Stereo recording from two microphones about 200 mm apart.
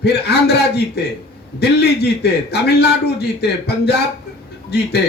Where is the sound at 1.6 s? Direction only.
55° left (ahead or behind).